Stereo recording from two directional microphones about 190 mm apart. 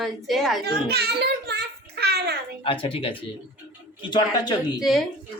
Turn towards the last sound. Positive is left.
turn(degrees=0)  # may be behind; listen again after turning